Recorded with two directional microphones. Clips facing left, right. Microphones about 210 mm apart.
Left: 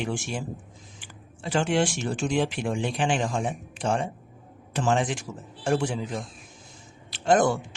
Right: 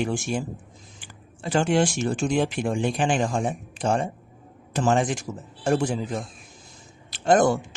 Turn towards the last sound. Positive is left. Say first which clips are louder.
# right 2 dB
turn(degrees=-45)  # may be behind; listen again after turning